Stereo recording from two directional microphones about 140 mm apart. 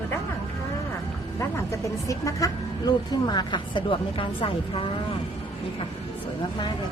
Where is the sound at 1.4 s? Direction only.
20° left (ahead or behind); by 4.9 s 40° left (ahead or behind).